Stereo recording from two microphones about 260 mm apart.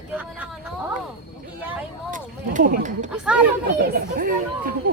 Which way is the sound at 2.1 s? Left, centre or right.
Right.